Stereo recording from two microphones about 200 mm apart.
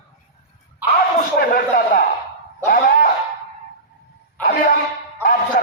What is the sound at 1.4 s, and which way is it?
Speech, 45° left (ahead or behind).